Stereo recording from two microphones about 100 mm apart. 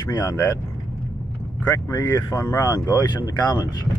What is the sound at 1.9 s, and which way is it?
Speech, 35° left (ahead or behind).